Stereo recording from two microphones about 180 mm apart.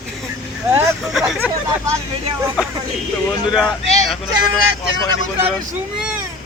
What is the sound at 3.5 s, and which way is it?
Speech, centre (ahead or behind).